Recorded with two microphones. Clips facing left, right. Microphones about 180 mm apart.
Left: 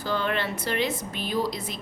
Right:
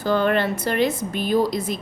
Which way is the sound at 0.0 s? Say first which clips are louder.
Right 8 dB; 50° right (ahead or behind).